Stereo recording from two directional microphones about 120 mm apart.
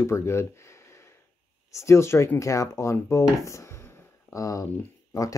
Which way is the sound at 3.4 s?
25° left (ahead or behind).